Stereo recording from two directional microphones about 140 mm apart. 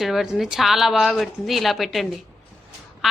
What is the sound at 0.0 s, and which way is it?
Speech, centre (ahead or behind).